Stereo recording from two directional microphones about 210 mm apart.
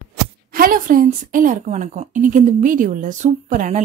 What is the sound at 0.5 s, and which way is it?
A woman's voice, 40° right (ahead or behind).